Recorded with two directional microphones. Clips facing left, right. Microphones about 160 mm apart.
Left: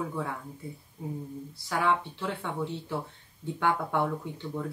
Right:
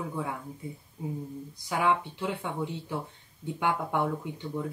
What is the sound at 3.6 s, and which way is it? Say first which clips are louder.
Speech: left 1 dB; 15° right (ahead or behind).